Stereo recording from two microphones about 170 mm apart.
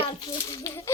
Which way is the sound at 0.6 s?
15° left (ahead or behind).